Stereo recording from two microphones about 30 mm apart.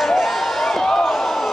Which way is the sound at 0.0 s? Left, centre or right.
Centre.